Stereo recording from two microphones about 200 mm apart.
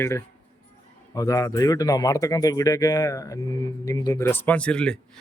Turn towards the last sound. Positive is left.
turn(degrees=5)  # may be behind; listen again after turning